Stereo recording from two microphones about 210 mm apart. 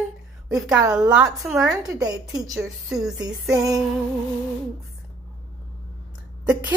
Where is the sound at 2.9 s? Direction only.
20° right (ahead or behind).